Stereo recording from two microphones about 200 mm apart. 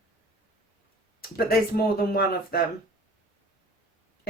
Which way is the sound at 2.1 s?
50° left (ahead or behind).